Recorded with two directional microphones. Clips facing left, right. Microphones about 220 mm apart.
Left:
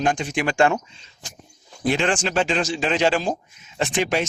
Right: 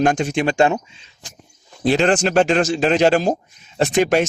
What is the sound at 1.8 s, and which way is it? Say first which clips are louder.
Speech: right 5 dB; 40° right (ahead or behind).